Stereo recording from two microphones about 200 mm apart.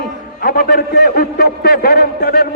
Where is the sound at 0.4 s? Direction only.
50° left (ahead or behind).